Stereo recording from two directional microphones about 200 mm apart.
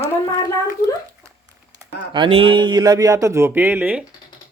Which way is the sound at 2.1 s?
25° right (ahead or behind).